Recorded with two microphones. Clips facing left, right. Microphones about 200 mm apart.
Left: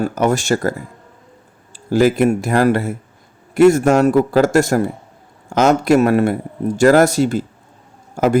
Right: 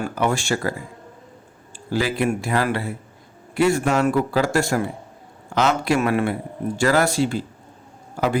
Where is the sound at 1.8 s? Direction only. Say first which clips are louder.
Left 8 dB; 45° left (ahead or behind).